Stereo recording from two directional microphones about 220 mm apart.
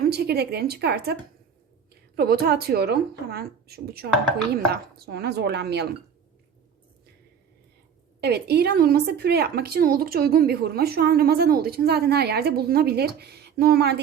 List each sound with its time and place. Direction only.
0.0 s speech: 45° right (ahead or behind)
2.1 s a woman's voice: 45° right (ahead or behind)
8.2 s a woman's voice: 45° right (ahead or behind)